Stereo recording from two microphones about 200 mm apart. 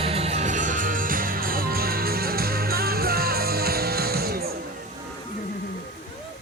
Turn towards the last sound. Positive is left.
turn(degrees=-50)  # may be behind; listen again after turning